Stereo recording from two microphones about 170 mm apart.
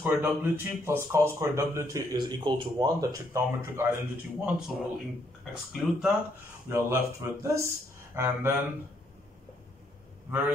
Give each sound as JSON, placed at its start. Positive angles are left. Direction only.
{"t": 0.0, "sound": "speech", "side_deg": -10}
{"t": 4.4, "sound": "a man's voice", "side_deg": -5}
{"t": 6.7, "sound": "speech", "side_deg": -15}